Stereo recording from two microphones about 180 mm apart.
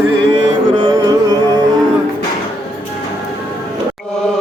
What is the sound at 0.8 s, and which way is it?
Music, 25° right (ahead or behind).